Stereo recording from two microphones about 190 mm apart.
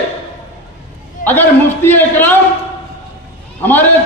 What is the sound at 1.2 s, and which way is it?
A man's voice, 10° left (ahead or behind).